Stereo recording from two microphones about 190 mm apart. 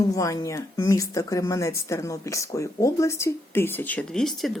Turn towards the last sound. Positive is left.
turn(degrees=0)  # may be behind; listen again after turning